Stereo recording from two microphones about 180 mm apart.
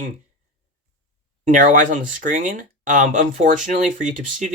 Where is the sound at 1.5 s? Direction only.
45° right (ahead or behind).